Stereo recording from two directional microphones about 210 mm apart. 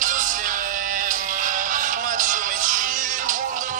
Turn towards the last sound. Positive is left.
turn(degrees=-40)  # may be behind; listen again after turning